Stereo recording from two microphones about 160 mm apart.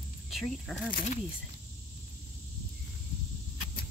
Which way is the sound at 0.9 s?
50° left (ahead or behind).